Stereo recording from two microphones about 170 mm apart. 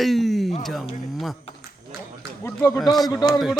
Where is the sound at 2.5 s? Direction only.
20° left (ahead or behind).